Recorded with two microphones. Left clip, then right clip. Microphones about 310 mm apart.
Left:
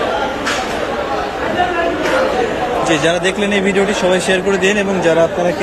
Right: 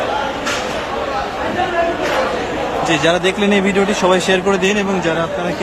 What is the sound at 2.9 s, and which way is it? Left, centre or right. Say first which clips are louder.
Speech: right 1 dB; centre.